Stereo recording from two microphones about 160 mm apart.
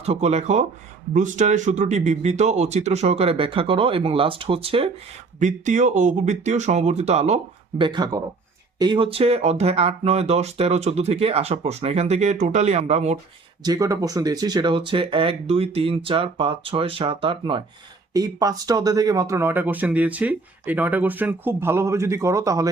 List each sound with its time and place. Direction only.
0.0 s speech: 40° right (ahead or behind)
5.4 s speech: 50° right (ahead or behind)
7.8 s speech: 30° right (ahead or behind); by 13.1 s 45° right (ahead or behind)
13.6 s speech: 25° right (ahead or behind)